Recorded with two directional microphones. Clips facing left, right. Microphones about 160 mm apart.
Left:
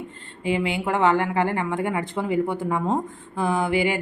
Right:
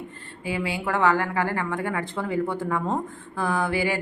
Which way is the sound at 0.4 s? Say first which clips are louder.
Left 4 dB; 20° left (ahead or behind).